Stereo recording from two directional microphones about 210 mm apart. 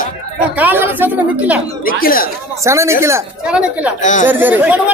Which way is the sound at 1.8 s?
45° left (ahead or behind).